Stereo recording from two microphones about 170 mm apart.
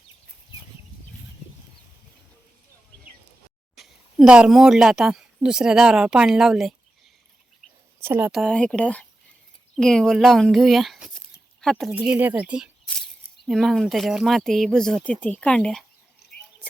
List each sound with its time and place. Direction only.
3.8 s speech: 5° right (ahead or behind)
8.0 s speech: 10° right (ahead or behind)
8.3 s speech: centre (ahead or behind)
16.2 s a sound: 75° left (ahead or behind)